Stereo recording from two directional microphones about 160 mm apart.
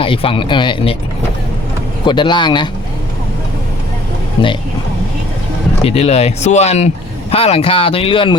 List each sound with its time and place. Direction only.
0.0 s speech: 35° left (ahead or behind)
2.0 s speech: 30° left (ahead or behind)
4.4 s speech: 30° left (ahead or behind)
5.8 s speech: 40° left (ahead or behind)